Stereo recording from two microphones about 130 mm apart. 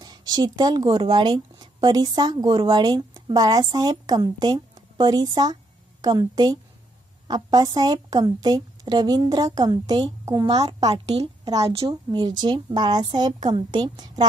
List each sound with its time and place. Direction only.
0.0 s a woman's voice: 30° right (ahead or behind)
10.3 s a woman's voice: 30° right (ahead or behind)
10.8 s a woman's voice: 55° right (ahead or behind)
11.7 s a woman's voice: 35° right (ahead or behind)